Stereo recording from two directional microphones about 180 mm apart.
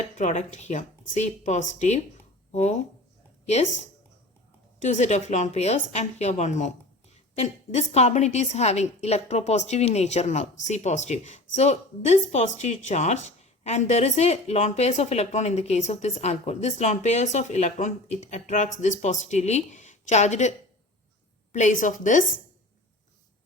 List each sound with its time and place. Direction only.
0.2 s a woman's voice: 40° left (ahead or behind)
4.8 s a woman's voice: 40° left (ahead or behind)
21.5 s a woman's voice: 45° left (ahead or behind)